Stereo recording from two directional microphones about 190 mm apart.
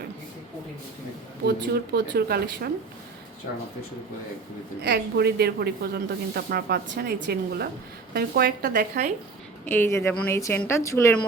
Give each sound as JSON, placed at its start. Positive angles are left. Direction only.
{"t": 1.9, "sound": "speech", "side_deg": -55}
{"t": 4.8, "sound": "speech", "side_deg": -55}
{"t": 9.6, "sound": "a woman's voice", "side_deg": 10}